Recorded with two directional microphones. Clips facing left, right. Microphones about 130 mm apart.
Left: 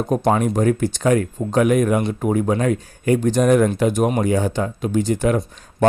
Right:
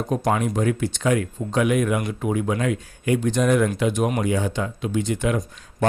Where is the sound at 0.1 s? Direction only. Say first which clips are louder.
Left 4 dB; 45° left (ahead or behind).